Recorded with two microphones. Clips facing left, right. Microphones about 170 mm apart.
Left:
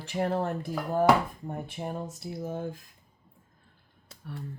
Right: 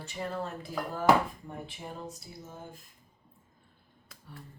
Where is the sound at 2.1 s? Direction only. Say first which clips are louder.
Left 12 dB; 85° left.